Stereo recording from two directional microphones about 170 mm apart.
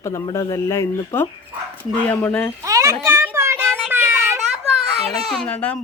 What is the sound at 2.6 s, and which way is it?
Speech, 20° right (ahead or behind).